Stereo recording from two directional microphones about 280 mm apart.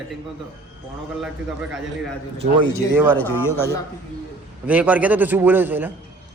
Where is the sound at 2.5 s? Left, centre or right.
Centre.